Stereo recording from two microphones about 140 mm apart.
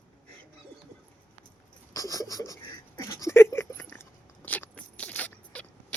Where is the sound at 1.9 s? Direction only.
25° left (ahead or behind).